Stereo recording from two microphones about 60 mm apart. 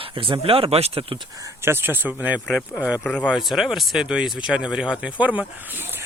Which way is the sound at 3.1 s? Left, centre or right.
Left.